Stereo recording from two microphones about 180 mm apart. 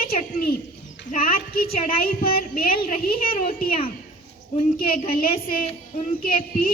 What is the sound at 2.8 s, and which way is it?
Speech, 40° left (ahead or behind).